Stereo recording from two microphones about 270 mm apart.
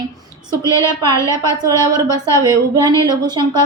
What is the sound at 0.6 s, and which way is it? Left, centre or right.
A woman's voice, centre.